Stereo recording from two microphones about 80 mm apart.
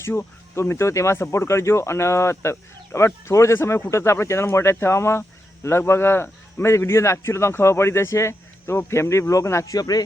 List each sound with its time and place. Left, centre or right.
0.0 s speech: left